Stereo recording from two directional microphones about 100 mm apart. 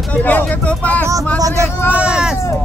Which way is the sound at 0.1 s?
15° left (ahead or behind).